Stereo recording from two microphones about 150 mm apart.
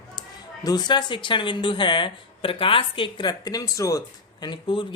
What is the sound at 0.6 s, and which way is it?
Speech, 25° left (ahead or behind).